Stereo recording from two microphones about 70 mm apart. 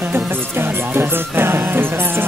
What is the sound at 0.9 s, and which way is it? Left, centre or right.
Music, right.